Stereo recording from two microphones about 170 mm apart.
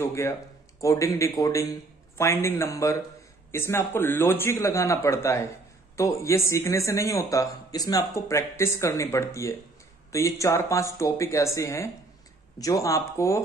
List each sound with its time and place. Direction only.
0.0 s speech: 15° left (ahead or behind)